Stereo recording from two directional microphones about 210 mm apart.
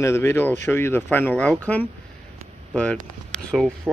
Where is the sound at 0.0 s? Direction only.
10° left (ahead or behind).